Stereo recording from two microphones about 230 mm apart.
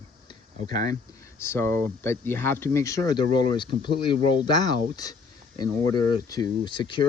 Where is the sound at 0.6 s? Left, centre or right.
Centre.